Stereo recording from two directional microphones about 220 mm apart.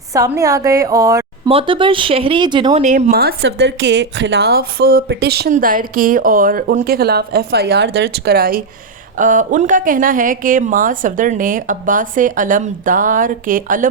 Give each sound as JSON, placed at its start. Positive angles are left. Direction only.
{"t": 0.1, "sound": "a woman's voice", "side_deg": -15}
{"t": 2.8, "sound": "a woman's voice", "side_deg": -35}